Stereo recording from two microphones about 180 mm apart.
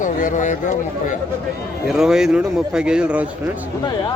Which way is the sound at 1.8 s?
5° right (ahead or behind).